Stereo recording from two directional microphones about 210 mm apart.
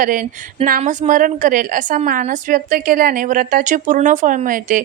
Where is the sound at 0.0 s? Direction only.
40° right (ahead or behind).